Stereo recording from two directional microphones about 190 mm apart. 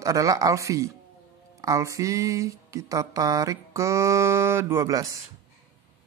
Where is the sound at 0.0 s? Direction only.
15° right (ahead or behind).